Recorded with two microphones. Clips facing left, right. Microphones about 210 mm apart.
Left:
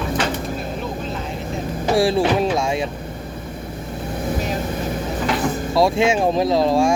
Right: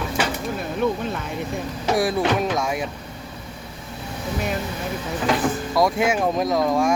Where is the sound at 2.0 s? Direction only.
30° left (ahead or behind).